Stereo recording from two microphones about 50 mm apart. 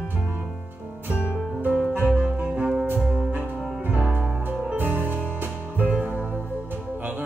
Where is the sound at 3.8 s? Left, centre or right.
Right.